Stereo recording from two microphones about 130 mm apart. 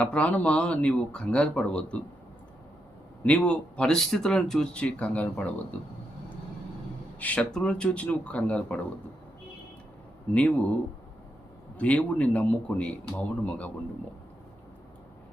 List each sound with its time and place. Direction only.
0.0 s speech: 10° left (ahead or behind)
3.2 s speech: 10° left (ahead or behind)
7.2 s speech: 10° left (ahead or behind)
10.3 s speech: 10° left (ahead or behind)
11.8 s speech: 10° left (ahead or behind)